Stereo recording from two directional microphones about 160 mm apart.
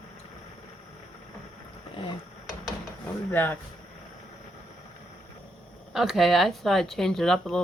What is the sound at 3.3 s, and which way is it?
Speech, 10° left (ahead or behind).